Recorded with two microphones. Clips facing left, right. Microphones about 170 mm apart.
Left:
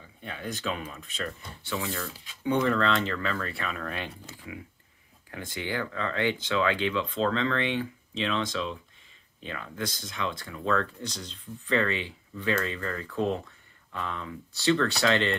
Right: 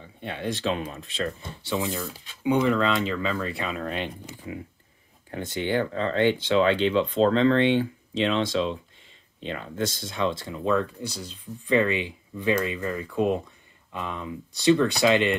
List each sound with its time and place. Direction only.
0.2 s speech: 30° right (ahead or behind)